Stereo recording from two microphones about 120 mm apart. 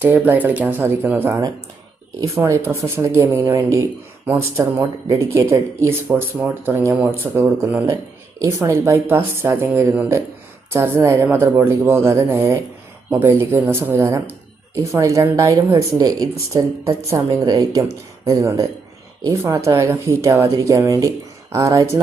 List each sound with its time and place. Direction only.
0.0 s speech: 15° right (ahead or behind)